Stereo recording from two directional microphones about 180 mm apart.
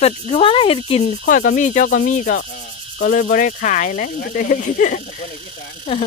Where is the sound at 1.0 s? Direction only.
50° left (ahead or behind).